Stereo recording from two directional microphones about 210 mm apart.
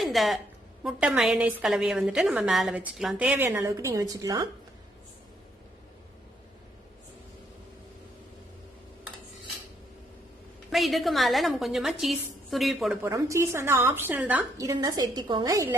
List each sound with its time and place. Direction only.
0.0 s a sound: centre (ahead or behind)
0.9 s a woman's voice: 5° right (ahead or behind)
10.7 s a woman's voice: centre (ahead or behind)
13.0 s a woman's voice: 15° right (ahead or behind)